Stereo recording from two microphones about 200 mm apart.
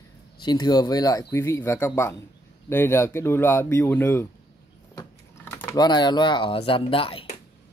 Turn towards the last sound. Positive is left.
turn(degrees=25)  # may be behind; listen again after turning